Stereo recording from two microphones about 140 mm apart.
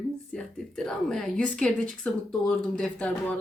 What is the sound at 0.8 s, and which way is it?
A woman's voice, 5° left (ahead or behind).